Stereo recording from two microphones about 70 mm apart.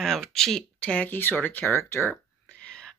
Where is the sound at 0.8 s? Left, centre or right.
Centre; by 2.1 s left.